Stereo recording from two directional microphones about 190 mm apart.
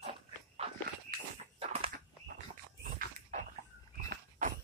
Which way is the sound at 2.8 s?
50° right (ahead or behind).